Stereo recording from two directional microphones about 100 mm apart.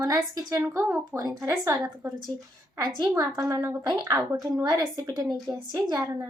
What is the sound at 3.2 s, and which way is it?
A woman's voice, 35° right (ahead or behind).